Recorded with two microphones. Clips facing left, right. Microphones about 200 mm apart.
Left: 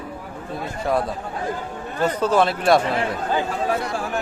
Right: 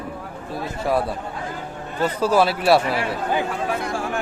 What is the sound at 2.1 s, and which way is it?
A man's voice, 10° right (ahead or behind).